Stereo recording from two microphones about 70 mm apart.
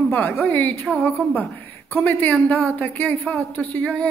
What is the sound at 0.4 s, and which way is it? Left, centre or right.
Speech, left.